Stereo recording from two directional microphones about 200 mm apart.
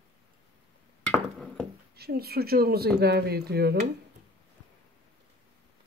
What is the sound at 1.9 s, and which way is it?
Speech, 50° right (ahead or behind).